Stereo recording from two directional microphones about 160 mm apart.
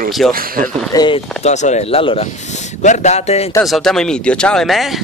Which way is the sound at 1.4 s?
45° left (ahead or behind).